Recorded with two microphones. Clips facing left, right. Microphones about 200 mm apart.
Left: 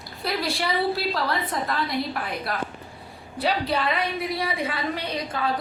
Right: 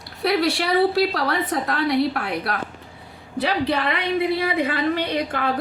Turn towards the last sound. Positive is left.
turn(degrees=-65)  # may be behind; listen again after turning